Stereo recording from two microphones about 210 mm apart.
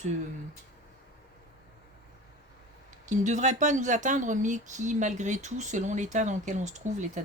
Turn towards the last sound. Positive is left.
turn(degrees=-35)  # may be behind; listen again after turning